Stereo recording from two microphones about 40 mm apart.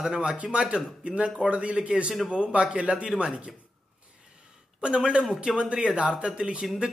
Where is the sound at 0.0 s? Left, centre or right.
Centre.